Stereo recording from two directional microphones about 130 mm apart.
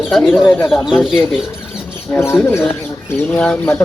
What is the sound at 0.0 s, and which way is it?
Speech, centre (ahead or behind).